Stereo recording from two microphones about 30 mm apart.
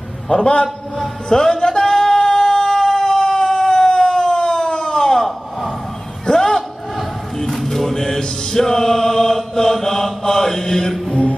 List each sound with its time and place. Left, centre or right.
0.3 s a man's voice: left
0.9 s singing: centre
6.2 s a sound: centre
7.3 s music: centre
8.5 s mantra: centre